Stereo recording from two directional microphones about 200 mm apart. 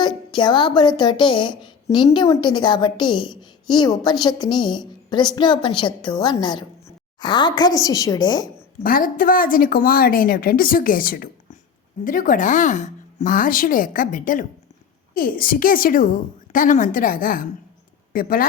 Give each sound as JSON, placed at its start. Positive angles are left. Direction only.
{"t": 0.0, "sound": "speech", "side_deg": 25}
{"t": 8.8, "sound": "a woman's voice", "side_deg": 45}